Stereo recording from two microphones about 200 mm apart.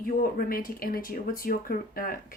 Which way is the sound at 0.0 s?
45° left (ahead or behind).